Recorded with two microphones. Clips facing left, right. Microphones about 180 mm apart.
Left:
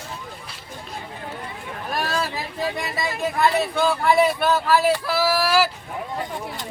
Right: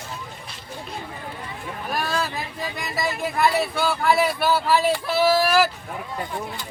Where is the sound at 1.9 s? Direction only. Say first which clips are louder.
Left 1 dB; centre (ahead or behind).